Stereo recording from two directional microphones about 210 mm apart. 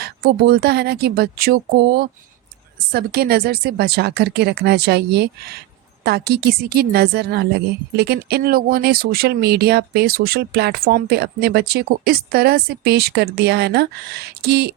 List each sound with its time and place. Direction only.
0.0 s a woman's voice: 45° right (ahead or behind)